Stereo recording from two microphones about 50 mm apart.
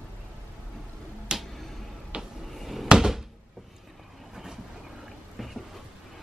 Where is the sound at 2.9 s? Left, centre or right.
Centre.